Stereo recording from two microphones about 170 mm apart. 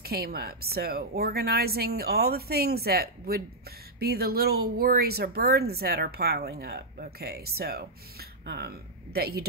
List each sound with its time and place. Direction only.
0.0 s a woman's voice: 65° right (ahead or behind)